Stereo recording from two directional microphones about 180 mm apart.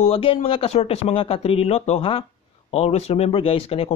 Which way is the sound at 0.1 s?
30° left (ahead or behind).